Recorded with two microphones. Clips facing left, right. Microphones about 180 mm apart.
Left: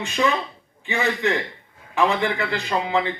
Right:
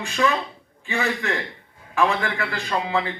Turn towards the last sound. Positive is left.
turn(degrees=20)  # may be behind; listen again after turning